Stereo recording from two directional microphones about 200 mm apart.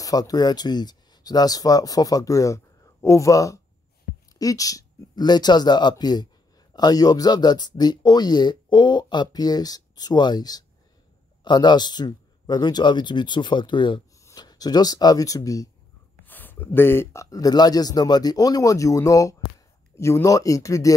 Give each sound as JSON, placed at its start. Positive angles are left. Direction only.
{"t": 0.0, "sound": "speech", "side_deg": 20}